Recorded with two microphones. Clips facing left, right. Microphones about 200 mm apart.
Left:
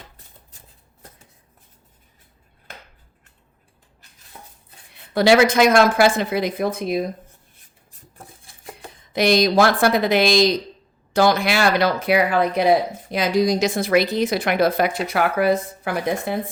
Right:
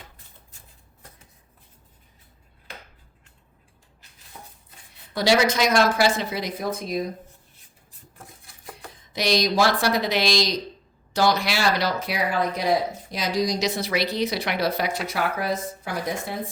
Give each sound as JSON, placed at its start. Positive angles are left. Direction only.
{"t": 5.1, "sound": "speech", "side_deg": 55}
{"t": 8.4, "sound": "dishes", "side_deg": 25}
{"t": 9.1, "sound": "speech", "side_deg": 55}